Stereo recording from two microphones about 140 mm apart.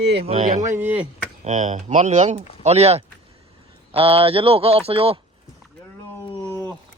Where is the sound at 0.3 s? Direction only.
55° right (ahead or behind).